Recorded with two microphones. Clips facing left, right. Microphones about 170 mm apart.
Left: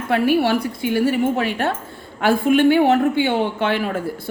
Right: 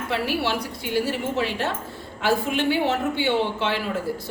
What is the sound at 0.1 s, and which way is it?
A woman's voice, 55° left (ahead or behind).